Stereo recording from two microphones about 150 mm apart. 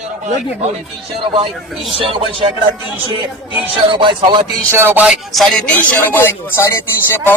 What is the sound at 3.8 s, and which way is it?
Speech, 30° right (ahead or behind).